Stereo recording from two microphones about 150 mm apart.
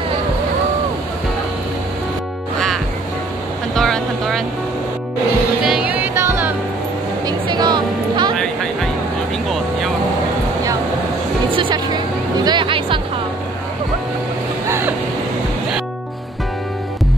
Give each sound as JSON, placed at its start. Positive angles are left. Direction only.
{"t": 3.7, "sound": "vehicle", "side_deg": 5}
{"t": 5.6, "sound": "music", "side_deg": -5}
{"t": 7.2, "sound": "music", "side_deg": -30}
{"t": 11.5, "sound": "music", "side_deg": -30}
{"t": 14.7, "sound": "vehicle", "side_deg": -15}